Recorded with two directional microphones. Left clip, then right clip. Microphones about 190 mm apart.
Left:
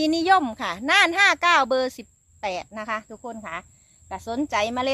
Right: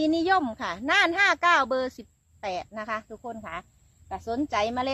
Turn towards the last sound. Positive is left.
turn(degrees=30)  # may be behind; listen again after turning